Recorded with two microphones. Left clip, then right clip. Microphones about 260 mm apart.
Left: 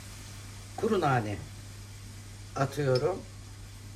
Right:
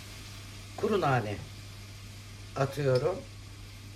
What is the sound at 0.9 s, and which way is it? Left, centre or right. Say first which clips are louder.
Speech: left 1 dB; centre.